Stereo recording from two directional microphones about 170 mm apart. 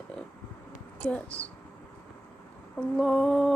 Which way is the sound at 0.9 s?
10° left (ahead or behind).